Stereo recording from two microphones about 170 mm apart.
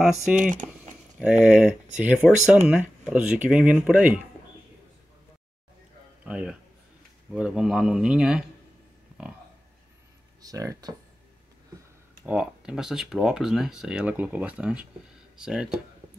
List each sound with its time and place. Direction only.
0.4 s typing: 50° right (ahead or behind)
1.2 s speech: 5° right (ahead or behind)
6.2 s speech: 5° right (ahead or behind)
10.4 s speech: 20° right (ahead or behind)
12.3 s speech: 5° right (ahead or behind)